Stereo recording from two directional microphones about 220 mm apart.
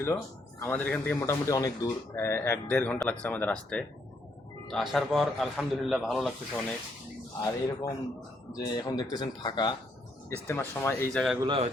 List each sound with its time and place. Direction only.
0.6 s a man's voice: 10° left (ahead or behind)
7.4 s speech: 15° left (ahead or behind)
11.4 s a man's voice: 25° right (ahead or behind)